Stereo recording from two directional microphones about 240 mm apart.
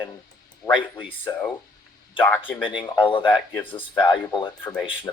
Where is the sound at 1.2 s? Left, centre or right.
Centre.